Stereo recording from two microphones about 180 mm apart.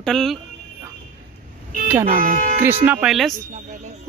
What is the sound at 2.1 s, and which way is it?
Speech, 50° right (ahead or behind).